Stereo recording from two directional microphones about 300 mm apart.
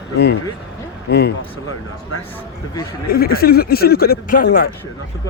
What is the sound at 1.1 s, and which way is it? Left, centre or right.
Speech, left.